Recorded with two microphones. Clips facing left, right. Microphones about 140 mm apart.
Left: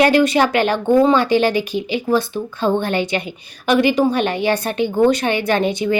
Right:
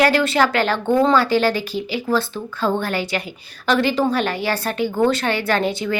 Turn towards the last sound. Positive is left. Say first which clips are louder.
# left 3 dB
turn(degrees=20)  # may be behind; listen again after turning